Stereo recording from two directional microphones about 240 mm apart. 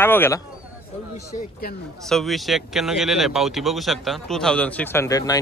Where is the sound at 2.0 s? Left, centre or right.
Centre.